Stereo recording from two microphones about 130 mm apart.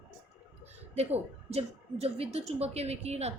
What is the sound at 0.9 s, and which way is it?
Speech, 55° right (ahead or behind).